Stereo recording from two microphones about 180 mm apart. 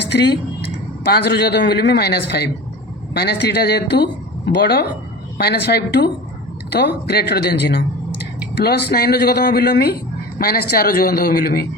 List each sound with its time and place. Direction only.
0.0 s a woman's voice: 70° left (ahead or behind)